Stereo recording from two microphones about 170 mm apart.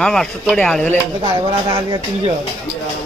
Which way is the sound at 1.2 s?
25° right (ahead or behind).